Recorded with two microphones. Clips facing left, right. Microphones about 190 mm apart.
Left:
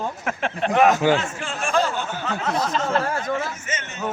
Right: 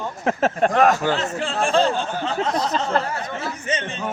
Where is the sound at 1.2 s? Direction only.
35° right (ahead or behind).